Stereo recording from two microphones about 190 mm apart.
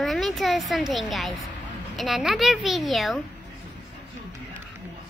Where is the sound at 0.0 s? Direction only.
Centre (ahead or behind).